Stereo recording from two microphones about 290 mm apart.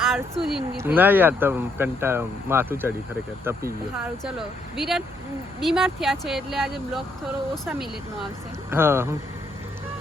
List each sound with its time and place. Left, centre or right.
0.0 s speech: centre